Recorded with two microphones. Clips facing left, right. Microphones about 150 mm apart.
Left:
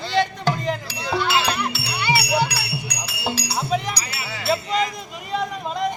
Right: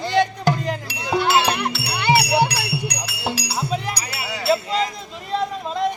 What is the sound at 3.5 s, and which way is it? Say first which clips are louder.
Music: left 1 dB; 5° right (ahead or behind).